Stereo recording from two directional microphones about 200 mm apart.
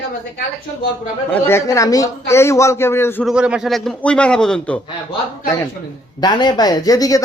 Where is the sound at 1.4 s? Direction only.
15° left (ahead or behind).